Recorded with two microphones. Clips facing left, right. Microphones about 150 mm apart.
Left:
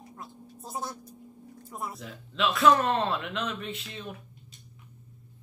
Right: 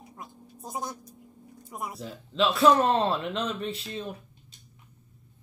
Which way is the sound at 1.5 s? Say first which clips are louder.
Right 1 dB; centre (ahead or behind).